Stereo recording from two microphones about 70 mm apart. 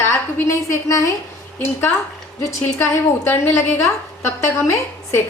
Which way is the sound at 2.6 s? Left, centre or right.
Left.